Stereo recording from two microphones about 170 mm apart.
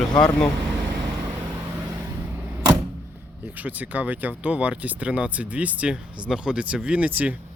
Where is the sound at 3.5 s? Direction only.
10° right (ahead or behind).